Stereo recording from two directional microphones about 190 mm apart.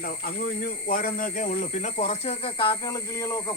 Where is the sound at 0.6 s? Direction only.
50° left (ahead or behind).